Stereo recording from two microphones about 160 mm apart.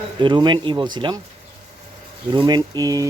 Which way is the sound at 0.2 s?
30° right (ahead or behind).